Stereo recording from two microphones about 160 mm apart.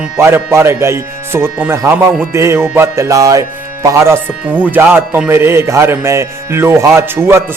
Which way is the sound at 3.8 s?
15° right (ahead or behind).